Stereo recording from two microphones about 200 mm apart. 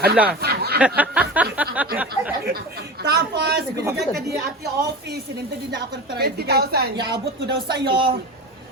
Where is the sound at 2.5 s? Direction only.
50° right (ahead or behind).